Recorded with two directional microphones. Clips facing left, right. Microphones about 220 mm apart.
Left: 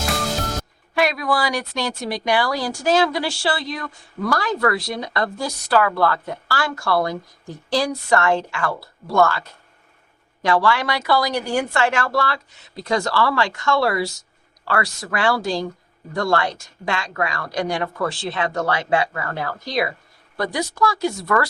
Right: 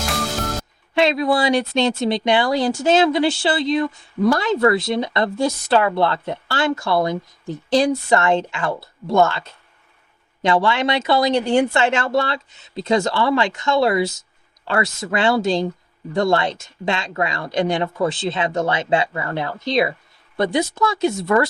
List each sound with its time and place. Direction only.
0.9 s speech: 25° right (ahead or behind)